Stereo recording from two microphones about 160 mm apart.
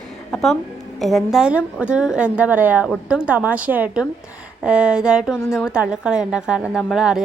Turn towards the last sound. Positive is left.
turn(degrees=-5)  # may be behind; listen again after turning